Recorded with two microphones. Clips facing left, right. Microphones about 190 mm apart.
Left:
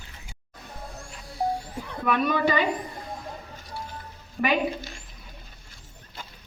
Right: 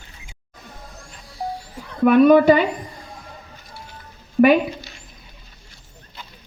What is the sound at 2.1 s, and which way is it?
Speech, 55° right (ahead or behind).